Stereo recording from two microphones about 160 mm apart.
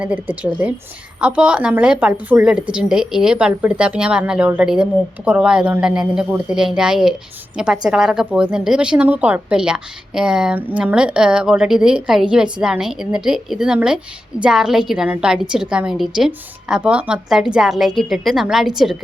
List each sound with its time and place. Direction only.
0.0 s a woman's voice: 10° right (ahead or behind)